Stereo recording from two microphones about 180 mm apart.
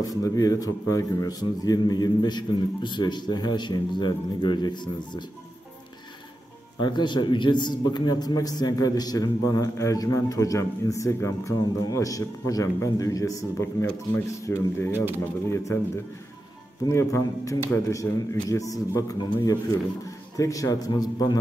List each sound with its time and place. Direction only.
0.0 s a man's voice: 20° left (ahead or behind)
6.8 s a man's voice: 25° left (ahead or behind)
16.8 s a man's voice: 15° left (ahead or behind)